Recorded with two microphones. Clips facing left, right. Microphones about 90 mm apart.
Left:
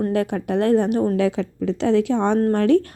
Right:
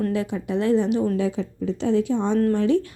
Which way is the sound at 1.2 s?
85° left.